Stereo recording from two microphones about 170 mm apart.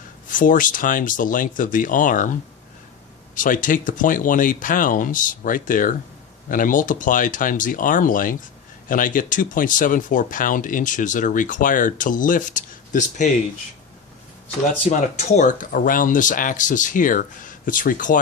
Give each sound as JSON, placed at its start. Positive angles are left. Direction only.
{"t": 0.3, "sound": "speech", "side_deg": 50}
{"t": 3.3, "sound": "speech", "side_deg": 50}
{"t": 14.8, "sound": "speech", "side_deg": 40}